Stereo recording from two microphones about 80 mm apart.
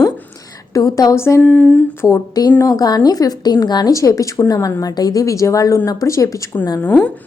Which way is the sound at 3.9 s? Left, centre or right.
Left.